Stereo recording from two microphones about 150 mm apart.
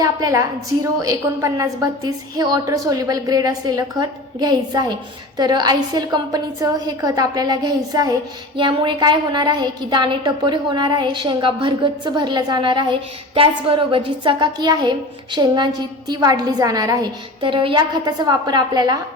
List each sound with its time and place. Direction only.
0.0 s a woman's voice: 25° right (ahead or behind)